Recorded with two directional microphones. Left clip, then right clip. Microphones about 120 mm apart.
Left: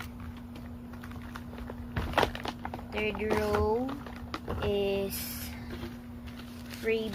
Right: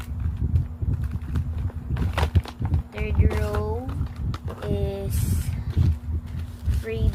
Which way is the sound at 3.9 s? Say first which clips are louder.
Right 1 dB; 50° left (ahead or behind).